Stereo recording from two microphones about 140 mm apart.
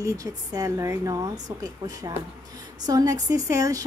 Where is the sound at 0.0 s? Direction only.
25° right (ahead or behind).